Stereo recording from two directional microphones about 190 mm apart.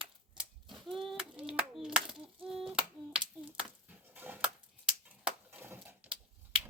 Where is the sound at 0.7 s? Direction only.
Centre (ahead or behind).